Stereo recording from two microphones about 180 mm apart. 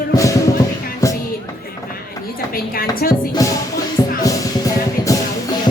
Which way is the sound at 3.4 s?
20° left (ahead or behind).